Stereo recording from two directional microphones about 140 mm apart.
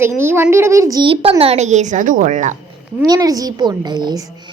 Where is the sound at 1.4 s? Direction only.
50° right (ahead or behind).